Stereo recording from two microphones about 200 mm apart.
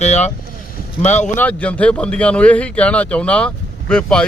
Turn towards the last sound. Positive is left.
turn(degrees=5)  # may be behind; listen again after turning